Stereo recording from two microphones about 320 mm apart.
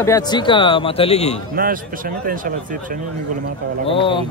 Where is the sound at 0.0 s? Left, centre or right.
Centre.